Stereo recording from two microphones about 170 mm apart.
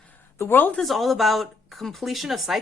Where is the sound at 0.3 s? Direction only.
10° left (ahead or behind).